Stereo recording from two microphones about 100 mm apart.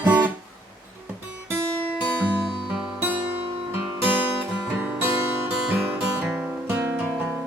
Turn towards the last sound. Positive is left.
turn(degrees=-20)  # may be behind; listen again after turning